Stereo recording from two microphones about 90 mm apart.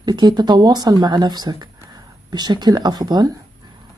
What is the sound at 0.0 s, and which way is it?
Speech, 50° right (ahead or behind).